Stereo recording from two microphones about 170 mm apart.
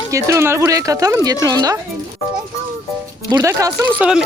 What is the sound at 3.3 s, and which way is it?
Speech, 15° right (ahead or behind).